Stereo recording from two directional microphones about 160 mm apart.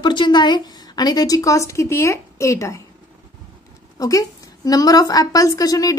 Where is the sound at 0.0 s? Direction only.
30° left (ahead or behind).